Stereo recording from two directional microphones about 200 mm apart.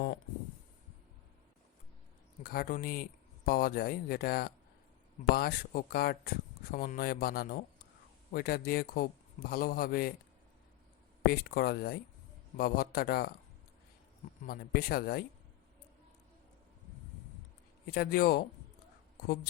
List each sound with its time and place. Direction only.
2.4 s speech: 50° left (ahead or behind)
11.3 s speech: 50° left (ahead or behind)
14.4 s speech: 50° left (ahead or behind)
17.9 s speech: 50° left (ahead or behind)